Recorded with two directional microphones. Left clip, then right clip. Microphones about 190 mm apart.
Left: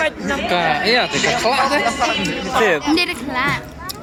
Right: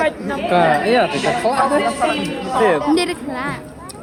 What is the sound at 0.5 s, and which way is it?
Speech, 40° right (ahead or behind).